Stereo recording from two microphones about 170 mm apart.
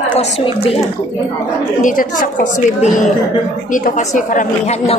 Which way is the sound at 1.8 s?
55° left (ahead or behind).